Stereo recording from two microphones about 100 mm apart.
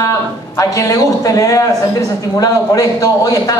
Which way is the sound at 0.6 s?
30° left (ahead or behind).